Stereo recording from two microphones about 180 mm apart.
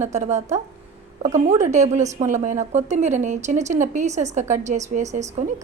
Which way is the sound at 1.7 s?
40° right (ahead or behind).